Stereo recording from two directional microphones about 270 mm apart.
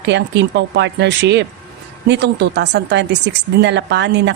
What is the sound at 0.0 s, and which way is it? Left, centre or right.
A woman's voice, right.